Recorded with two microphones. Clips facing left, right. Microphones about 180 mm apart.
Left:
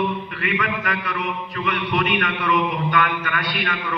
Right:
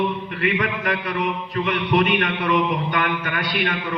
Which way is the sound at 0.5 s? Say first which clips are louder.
Right 1 dB; 30° right (ahead or behind).